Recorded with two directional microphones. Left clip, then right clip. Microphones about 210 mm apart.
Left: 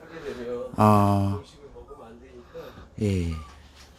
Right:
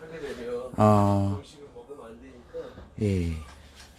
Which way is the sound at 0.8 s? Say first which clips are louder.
Left 2 dB; 5° left (ahead or behind).